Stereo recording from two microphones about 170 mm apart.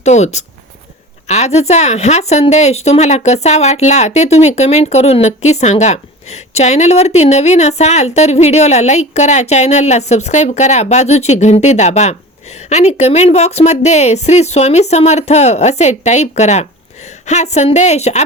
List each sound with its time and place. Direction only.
0.0 s a woman's voice: 40° left (ahead or behind)